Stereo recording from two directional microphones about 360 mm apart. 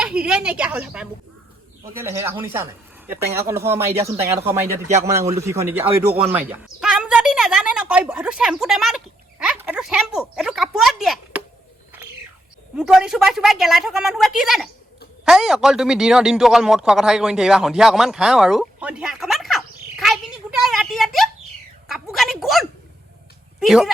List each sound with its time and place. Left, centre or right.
0.0 s a man's voice: centre
4.9 s speech: centre
12.7 s a man's voice: centre
20.6 s a sound: centre
23.6 s a man's voice: centre